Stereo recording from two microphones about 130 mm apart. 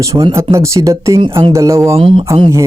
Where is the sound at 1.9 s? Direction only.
45° right (ahead or behind).